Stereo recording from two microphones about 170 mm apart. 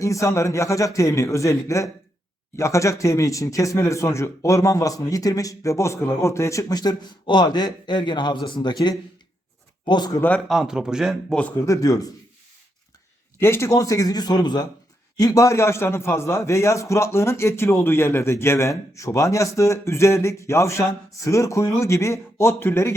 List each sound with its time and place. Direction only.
0.0 s a man's voice: 20° left (ahead or behind)
10.2 s a man's voice: 10° left (ahead or behind)
10.5 s speech: 5° right (ahead or behind); by 12.1 s 20° left (ahead or behind)
13.4 s a man's voice: 15° left (ahead or behind)